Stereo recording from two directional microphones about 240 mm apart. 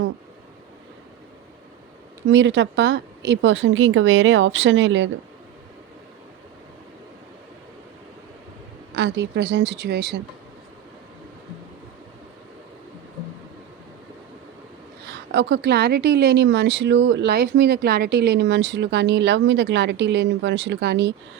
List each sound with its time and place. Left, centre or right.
2.3 s speech: right
9.0 s speech: right
15.0 s speech: right